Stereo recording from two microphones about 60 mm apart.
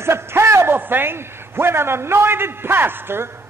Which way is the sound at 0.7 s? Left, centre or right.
Right.